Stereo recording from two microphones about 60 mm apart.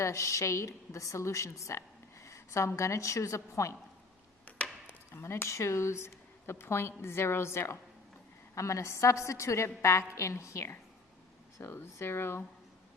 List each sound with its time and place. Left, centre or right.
0.0 s a woman's voice: left
4.5 s chop: left
4.9 s speech: left
8.5 s a woman's voice: left
11.7 s speech: left